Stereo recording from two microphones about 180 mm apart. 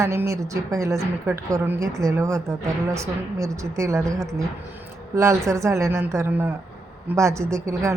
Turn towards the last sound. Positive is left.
turn(degrees=-15)  # may be behind; listen again after turning